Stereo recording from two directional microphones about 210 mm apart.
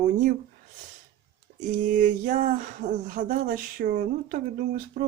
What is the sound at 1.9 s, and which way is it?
Speech, 40° right (ahead or behind).